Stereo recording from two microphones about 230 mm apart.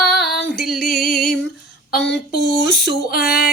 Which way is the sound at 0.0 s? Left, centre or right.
Centre.